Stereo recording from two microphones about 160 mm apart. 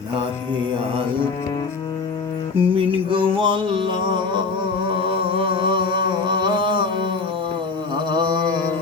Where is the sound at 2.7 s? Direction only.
35° right (ahead or behind).